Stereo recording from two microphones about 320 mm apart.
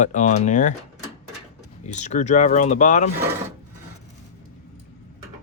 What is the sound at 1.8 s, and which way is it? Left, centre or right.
Speech, left.